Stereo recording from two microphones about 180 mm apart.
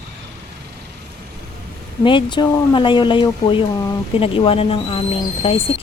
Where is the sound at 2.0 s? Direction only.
25° left (ahead or behind).